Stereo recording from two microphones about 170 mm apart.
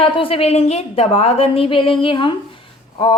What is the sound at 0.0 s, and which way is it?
A woman's voice, 30° left (ahead or behind).